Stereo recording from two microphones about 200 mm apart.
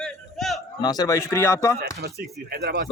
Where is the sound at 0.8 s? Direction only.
20° left (ahead or behind).